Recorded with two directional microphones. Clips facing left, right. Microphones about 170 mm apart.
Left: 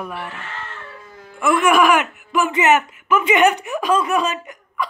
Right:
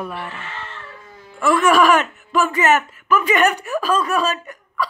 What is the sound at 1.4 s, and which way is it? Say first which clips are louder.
Speech: right 1 dB; 15° left (ahead or behind).